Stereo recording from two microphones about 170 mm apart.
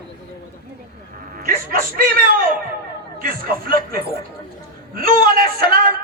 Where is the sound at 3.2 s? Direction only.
55° right (ahead or behind).